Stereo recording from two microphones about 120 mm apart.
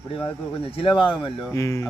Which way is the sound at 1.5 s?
25° left (ahead or behind).